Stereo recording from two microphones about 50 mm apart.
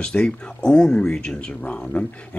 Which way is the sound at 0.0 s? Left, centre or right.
Left.